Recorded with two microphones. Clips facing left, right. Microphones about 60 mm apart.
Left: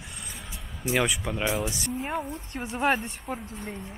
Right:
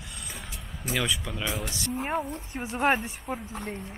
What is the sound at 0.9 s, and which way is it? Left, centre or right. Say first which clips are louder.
Speech: left 3 dB; centre.